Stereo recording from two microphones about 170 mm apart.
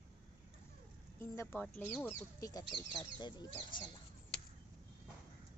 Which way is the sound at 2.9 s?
25° left (ahead or behind).